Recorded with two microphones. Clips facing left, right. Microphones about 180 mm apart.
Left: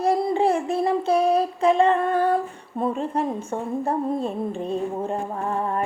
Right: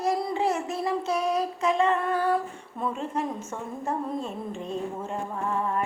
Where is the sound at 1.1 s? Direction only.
30° left (ahead or behind).